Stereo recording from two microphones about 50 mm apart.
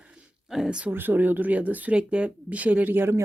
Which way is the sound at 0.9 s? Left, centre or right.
Right.